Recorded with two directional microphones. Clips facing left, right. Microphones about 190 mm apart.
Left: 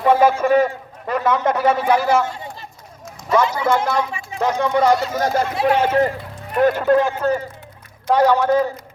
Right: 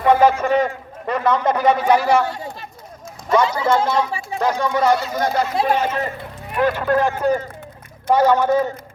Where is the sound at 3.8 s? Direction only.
30° right (ahead or behind).